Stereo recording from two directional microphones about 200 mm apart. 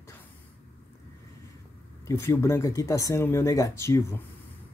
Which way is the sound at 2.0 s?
15° left (ahead or behind).